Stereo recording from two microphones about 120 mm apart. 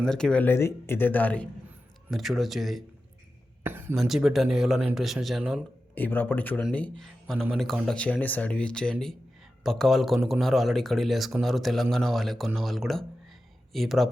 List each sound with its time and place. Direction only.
0.0 s speech: 5° left (ahead or behind)
2.0 s speech: centre (ahead or behind)
3.6 s speech: 20° right (ahead or behind)
3.9 s speech: centre (ahead or behind)
5.9 s speech: 15° left (ahead or behind); by 14.1 s centre (ahead or behind)